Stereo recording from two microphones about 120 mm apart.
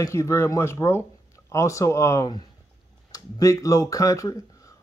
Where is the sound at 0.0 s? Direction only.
25° left (ahead or behind).